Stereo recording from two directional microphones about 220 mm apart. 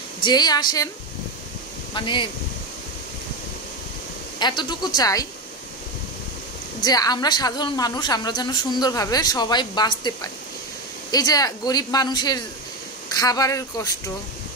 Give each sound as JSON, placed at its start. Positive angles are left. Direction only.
{"t": 0.2, "sound": "a woman's voice", "side_deg": 20}
{"t": 2.0, "sound": "a woman's voice", "side_deg": 20}
{"t": 4.4, "sound": "a woman's voice", "side_deg": 20}
{"t": 6.8, "sound": "a woman's voice", "side_deg": 15}